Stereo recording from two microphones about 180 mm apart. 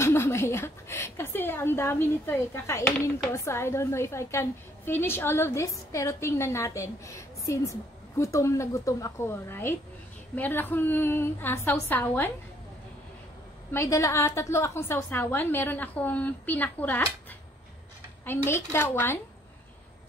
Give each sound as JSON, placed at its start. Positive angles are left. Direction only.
{"t": 0.0, "sound": "a woman's voice", "side_deg": 15}
{"t": 13.7, "sound": "a woman's voice", "side_deg": 15}
{"t": 18.2, "sound": "a woman's voice", "side_deg": 10}